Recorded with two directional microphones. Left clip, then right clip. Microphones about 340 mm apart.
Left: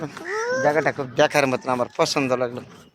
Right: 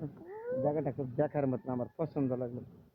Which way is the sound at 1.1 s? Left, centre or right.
Centre.